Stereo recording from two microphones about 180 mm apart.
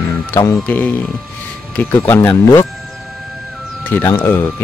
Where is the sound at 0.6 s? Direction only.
10° left (ahead or behind).